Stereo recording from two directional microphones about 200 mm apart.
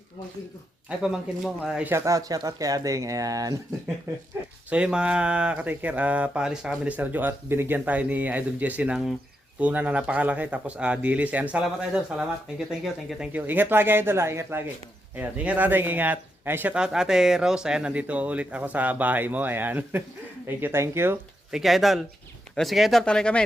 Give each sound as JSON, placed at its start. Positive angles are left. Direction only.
{"t": 0.9, "sound": "speech", "side_deg": -5}
{"t": 21.6, "sound": "speech", "side_deg": 0}